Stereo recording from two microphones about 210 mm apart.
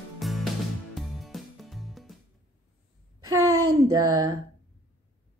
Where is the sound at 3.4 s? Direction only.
15° right (ahead or behind).